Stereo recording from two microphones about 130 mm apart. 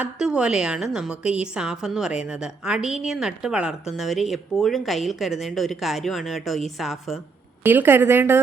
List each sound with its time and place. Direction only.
0.0 s a woman's voice: 5° right (ahead or behind)
7.6 s a woman's voice: 15° right (ahead or behind)